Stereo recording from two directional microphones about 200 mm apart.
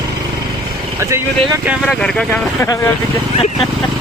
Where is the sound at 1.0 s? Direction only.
15° right (ahead or behind).